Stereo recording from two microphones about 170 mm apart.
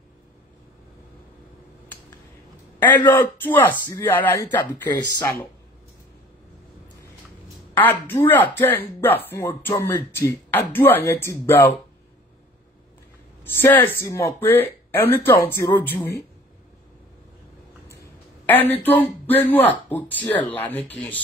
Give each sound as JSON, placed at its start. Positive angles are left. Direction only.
{"t": 3.4, "sound": "speech", "side_deg": 10}
{"t": 7.8, "sound": "speech", "side_deg": 10}
{"t": 13.4, "sound": "speech", "side_deg": 10}
{"t": 18.4, "sound": "speech", "side_deg": 10}